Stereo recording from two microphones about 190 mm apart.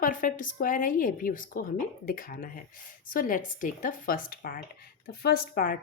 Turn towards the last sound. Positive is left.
turn(degrees=45)  # may be behind; listen again after turning